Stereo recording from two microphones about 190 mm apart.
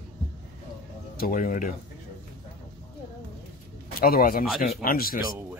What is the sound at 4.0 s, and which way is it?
Speech, 50° left (ahead or behind).